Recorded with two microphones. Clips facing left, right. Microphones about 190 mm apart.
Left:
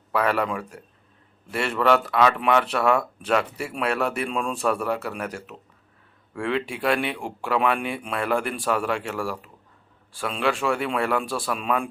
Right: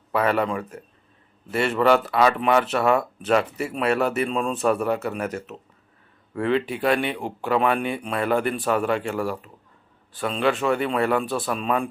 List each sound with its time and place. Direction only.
0.1 s speech: centre (ahead or behind)
10.2 s speech: centre (ahead or behind)